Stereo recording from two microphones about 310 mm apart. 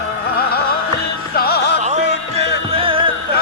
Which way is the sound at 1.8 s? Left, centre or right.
Right.